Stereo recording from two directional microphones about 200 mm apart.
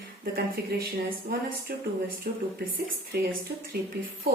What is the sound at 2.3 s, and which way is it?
Speech, 45° right (ahead or behind).